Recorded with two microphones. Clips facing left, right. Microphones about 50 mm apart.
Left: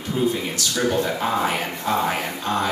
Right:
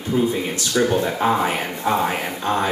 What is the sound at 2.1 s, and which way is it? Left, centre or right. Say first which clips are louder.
Music: even; centre.